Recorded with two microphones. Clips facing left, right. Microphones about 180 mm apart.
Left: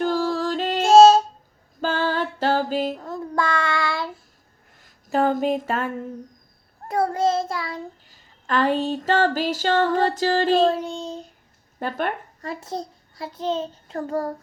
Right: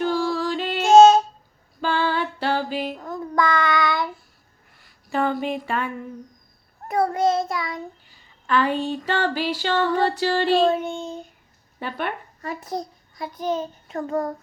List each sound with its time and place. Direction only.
0.0 s female singing: 45° left (ahead or behind)
1.8 s female singing: 45° left (ahead or behind)
3.0 s child singing: 30° left (ahead or behind)
4.8 s speech: 45° left (ahead or behind)
6.8 s child singing: 25° left (ahead or behind)
8.1 s a sound: 40° left (ahead or behind)
11.8 s a child's voice: 45° left (ahead or behind)